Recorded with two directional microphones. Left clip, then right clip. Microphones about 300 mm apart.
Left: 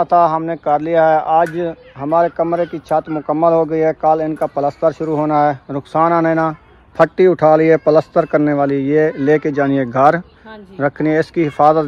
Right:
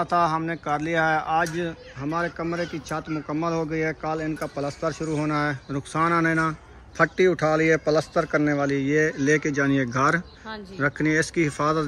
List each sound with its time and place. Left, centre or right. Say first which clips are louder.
0.0 s speech: left 10 dB; centre